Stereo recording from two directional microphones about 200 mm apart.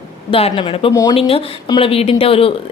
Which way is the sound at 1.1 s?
30° left (ahead or behind).